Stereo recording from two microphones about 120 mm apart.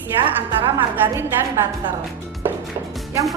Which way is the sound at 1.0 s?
25° right (ahead or behind).